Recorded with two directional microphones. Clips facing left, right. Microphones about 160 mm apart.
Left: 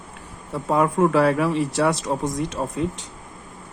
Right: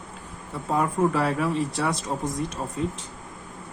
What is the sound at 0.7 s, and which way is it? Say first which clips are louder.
Speech: left 5 dB; 85° left.